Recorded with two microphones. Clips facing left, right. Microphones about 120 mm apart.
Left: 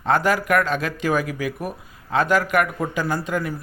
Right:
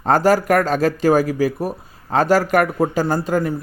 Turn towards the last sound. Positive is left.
turn(degrees=-35)  # may be behind; listen again after turning